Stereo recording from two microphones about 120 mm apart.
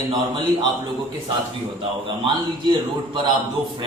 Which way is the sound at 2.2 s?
40° right (ahead or behind).